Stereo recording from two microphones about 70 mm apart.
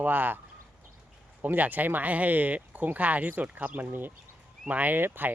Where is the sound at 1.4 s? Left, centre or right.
Right.